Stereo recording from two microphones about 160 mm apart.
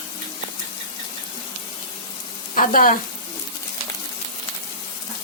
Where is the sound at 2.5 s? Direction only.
55° left (ahead or behind).